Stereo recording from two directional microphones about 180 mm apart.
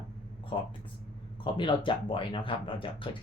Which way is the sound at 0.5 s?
30° left (ahead or behind).